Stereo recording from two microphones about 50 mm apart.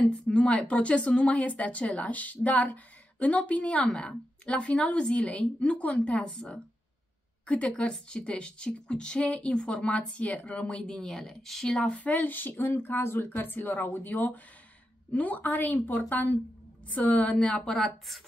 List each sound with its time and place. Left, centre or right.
0.1 s speech: left
7.4 s speech: left
10.8 s speech: centre
11.7 s speech: centre
12.0 s speech: left; by 17.9 s centre